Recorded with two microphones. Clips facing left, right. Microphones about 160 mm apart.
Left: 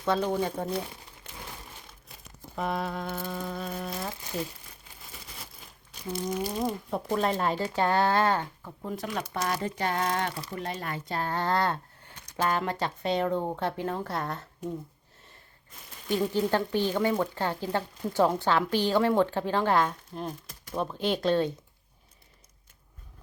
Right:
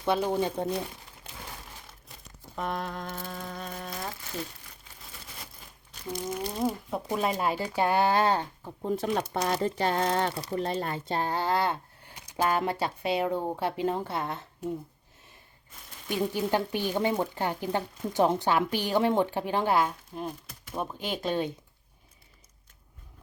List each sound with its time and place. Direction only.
0.0 s speech: 10° right (ahead or behind)
2.6 s speech: 5° left (ahead or behind)
6.1 s speech: centre (ahead or behind); by 8.7 s 20° right (ahead or behind)
8.8 s speech: 30° right (ahead or behind)
11.3 s a sound: 5° right (ahead or behind)
12.8 s speech: 10° right (ahead or behind)
14.1 s speech: centre (ahead or behind)
16.0 s speech: 15° right (ahead or behind)